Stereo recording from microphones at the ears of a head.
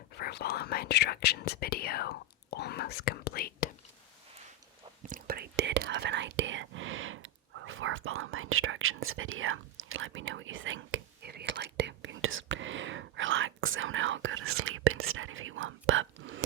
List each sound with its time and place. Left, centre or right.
0.1 s whispering: left
5.0 s whispering: right